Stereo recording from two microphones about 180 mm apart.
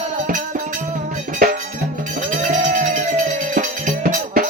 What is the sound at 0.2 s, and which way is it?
Music, 45° right (ahead or behind).